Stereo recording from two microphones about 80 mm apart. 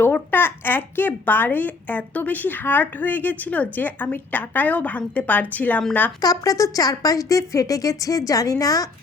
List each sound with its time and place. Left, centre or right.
0.0 s a woman's voice: left
6.2 s a woman's voice: left